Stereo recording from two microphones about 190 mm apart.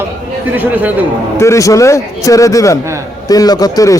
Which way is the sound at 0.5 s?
10° right (ahead or behind).